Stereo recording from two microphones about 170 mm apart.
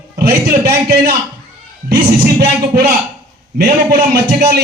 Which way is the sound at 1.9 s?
70° right (ahead or behind).